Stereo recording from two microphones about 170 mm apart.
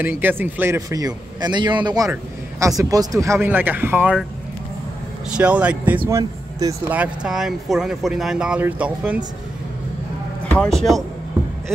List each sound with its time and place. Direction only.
0.0 s a man's voice: 10° right (ahead or behind)
5.4 s speech: 5° right (ahead or behind)
6.0 s speech: 20° right (ahead or behind)
10.5 s speech: 5° left (ahead or behind)